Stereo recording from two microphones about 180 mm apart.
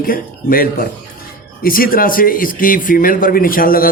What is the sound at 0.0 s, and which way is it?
A man's voice, 55° left (ahead or behind).